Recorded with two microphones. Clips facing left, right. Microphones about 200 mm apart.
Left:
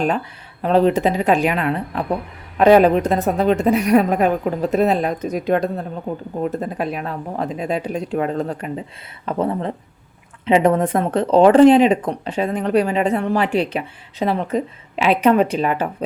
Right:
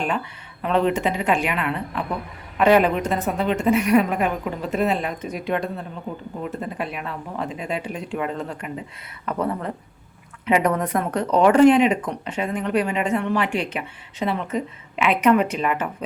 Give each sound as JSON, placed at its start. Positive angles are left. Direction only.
{"t": 0.6, "sound": "speech", "side_deg": 35}
{"t": 9.2, "sound": "speech", "side_deg": 25}